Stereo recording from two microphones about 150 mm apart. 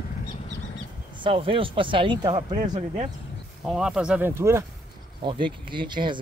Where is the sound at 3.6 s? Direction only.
5° right (ahead or behind).